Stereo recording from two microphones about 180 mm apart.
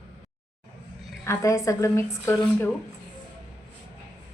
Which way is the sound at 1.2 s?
15° left (ahead or behind).